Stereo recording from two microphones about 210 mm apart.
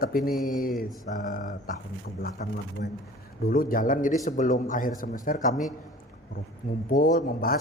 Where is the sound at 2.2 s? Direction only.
55° left (ahead or behind).